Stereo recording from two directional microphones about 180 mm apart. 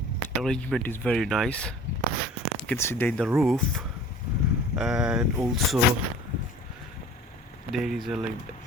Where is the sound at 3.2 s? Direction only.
5° right (ahead or behind).